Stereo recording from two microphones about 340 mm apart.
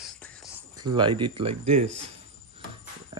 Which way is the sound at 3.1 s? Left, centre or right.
Centre.